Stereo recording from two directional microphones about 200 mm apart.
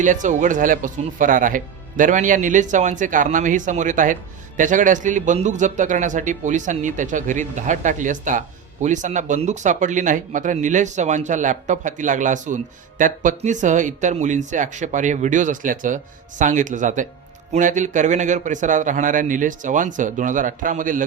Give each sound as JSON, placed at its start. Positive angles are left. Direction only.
{"t": 0.0, "sound": "speech", "side_deg": -40}